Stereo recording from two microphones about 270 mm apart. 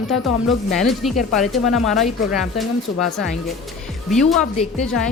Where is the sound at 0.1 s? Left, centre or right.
Centre.